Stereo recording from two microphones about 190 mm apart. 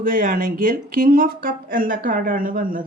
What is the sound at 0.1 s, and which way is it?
A woman's voice, 45° right (ahead or behind).